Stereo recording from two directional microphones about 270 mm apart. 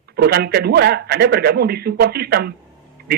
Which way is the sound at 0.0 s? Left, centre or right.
Right.